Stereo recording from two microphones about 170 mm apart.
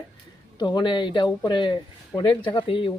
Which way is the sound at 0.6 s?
25° left (ahead or behind).